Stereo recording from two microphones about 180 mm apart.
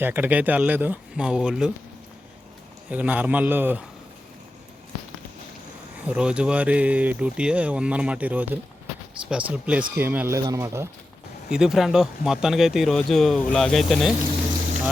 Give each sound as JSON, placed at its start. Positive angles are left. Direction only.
{"t": 0.0, "sound": "speech", "side_deg": -10}
{"t": 2.9, "sound": "speech", "side_deg": -10}
{"t": 6.1, "sound": "speech", "side_deg": -5}
{"t": 11.4, "sound": "speech", "side_deg": -5}